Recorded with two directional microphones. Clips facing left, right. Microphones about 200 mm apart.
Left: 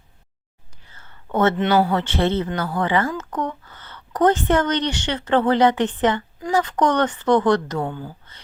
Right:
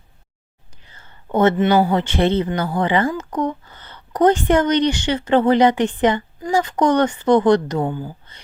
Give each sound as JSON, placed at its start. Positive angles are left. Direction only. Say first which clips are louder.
{"t": 0.9, "sound": "whispering", "louder": "right 4 dB", "side_deg": -15}
{"t": 1.9, "sound": "speech", "louder": "right 3 dB", "side_deg": -15}